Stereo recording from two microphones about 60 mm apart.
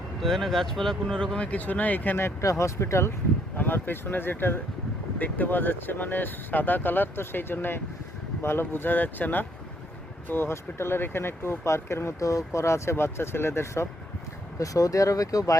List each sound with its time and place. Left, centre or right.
0.2 s speech: centre
1.5 s speech: left
2.4 s speech: left
3.6 s speech: left
12.2 s speech: left
14.6 s speech: left